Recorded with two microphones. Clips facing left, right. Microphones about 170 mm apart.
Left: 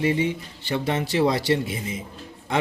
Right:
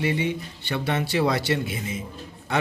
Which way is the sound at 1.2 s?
25° left (ahead or behind).